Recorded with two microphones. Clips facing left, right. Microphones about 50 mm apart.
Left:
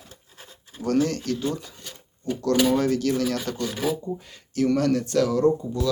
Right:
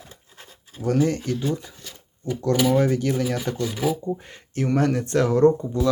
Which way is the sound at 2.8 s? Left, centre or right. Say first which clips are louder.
Right 1 dB; right.